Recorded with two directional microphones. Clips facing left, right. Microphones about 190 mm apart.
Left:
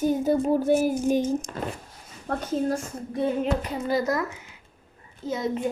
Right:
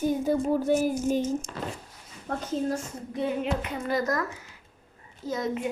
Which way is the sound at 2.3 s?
60° left (ahead or behind).